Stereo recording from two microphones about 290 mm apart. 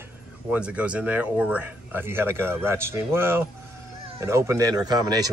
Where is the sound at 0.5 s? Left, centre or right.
Centre.